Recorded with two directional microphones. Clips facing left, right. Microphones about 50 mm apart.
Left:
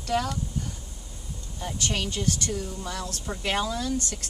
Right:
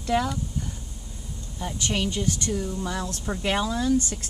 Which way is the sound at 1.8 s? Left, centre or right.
Centre.